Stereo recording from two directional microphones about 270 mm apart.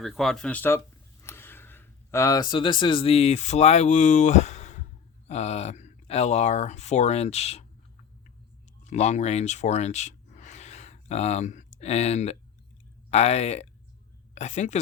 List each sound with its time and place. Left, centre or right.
0.0 s speech: centre; by 7.7 s left
8.8 s speech: left